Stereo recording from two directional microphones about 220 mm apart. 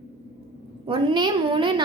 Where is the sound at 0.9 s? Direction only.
20° right (ahead or behind).